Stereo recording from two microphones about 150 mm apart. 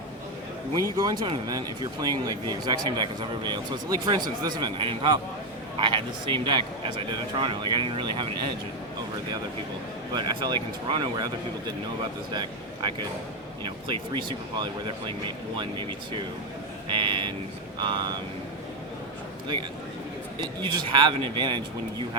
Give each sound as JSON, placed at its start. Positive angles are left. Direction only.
{"t": 0.9, "sound": "speech", "side_deg": -30}
{"t": 10.2, "sound": "speech", "side_deg": -30}
{"t": 12.3, "sound": "speech", "side_deg": -30}
{"t": 20.4, "sound": "speech", "side_deg": -30}